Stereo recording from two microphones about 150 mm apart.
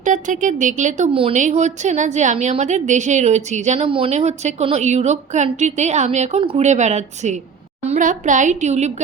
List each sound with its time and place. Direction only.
0.0 s a woman's voice: 55° right (ahead or behind)
1.1 s speech: 40° right (ahead or behind)
1.4 s a woman's voice: 50° right (ahead or behind)
3.8 s a woman's voice: 35° right (ahead or behind)